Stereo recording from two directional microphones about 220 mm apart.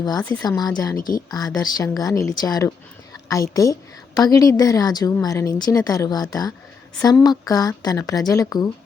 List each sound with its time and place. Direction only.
0.0 s a woman's voice: 20° left (ahead or behind)
0.9 s a woman's voice: 40° left (ahead or behind)
1.3 s a woman's voice: 15° left (ahead or behind)